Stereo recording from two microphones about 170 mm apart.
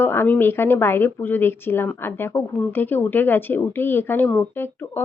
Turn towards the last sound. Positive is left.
turn(degrees=10)  # may be behind; listen again after turning